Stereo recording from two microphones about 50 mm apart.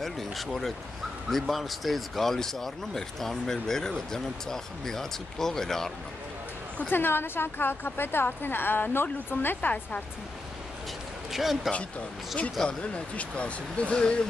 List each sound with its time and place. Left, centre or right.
0.0 s speech: centre
6.9 s speech: left
11.3 s speech: centre
12.6 s speech: left